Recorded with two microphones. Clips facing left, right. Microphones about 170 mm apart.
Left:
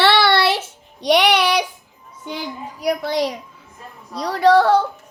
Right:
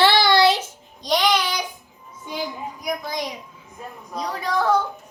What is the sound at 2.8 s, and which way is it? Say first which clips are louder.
A child's voice: left 8 dB; 70° left (ahead or behind).